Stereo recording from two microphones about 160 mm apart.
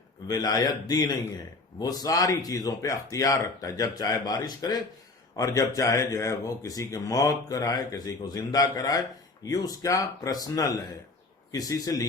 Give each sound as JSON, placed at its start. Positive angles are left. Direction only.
{"t": 0.3, "sound": "speech", "side_deg": 25}